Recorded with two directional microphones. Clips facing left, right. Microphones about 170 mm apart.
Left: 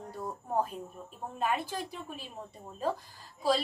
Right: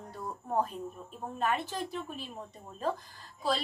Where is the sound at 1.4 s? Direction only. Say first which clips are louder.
Even; 10° left (ahead or behind).